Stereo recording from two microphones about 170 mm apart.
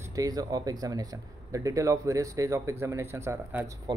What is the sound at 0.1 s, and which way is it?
Speech, 20° right (ahead or behind).